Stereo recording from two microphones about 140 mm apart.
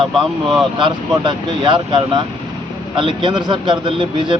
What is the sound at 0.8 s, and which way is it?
Speech, 35° right (ahead or behind).